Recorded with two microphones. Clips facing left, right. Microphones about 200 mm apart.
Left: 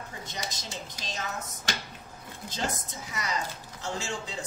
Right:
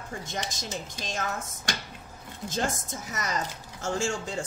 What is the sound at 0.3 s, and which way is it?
Speech, 45° right (ahead or behind).